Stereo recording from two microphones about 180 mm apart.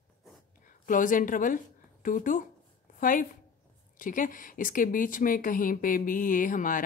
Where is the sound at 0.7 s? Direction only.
50° left (ahead or behind).